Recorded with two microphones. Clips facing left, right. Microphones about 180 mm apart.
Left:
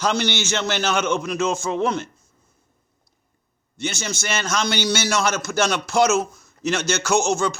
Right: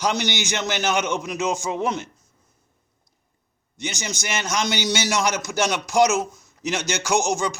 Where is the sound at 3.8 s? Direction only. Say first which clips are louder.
Left 3 dB; 15° right (ahead or behind).